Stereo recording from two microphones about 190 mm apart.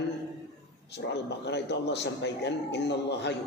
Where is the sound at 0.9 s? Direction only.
65° left (ahead or behind).